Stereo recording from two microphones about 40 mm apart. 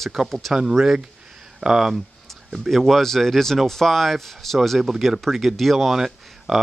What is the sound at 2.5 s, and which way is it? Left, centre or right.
Speech, centre.